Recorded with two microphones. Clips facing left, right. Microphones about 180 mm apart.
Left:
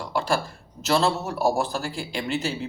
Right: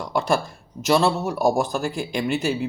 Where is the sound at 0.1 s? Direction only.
20° right (ahead or behind).